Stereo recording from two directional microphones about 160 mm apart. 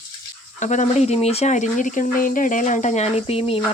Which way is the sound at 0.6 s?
50° left (ahead or behind).